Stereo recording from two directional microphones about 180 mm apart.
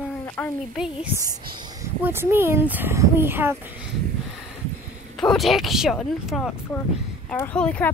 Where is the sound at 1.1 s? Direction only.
20° right (ahead or behind).